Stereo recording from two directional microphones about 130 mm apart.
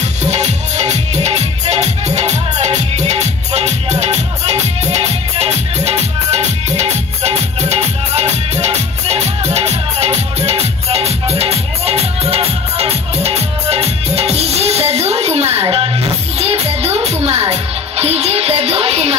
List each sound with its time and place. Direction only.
0.2 s music: 60° right (ahead or behind)